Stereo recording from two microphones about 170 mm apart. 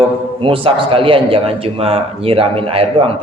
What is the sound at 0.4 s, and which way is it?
A man's voice, 30° right (ahead or behind).